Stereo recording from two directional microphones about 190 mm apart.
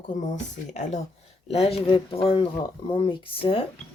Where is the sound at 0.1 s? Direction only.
40° left (ahead or behind).